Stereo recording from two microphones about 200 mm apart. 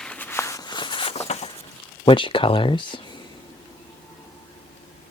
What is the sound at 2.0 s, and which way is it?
Speech, 25° left (ahead or behind).